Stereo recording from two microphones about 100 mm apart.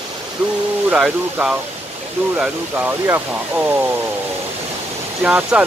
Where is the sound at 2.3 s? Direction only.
15° right (ahead or behind).